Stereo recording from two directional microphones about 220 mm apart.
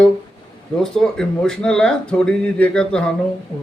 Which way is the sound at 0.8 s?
Centre (ahead or behind).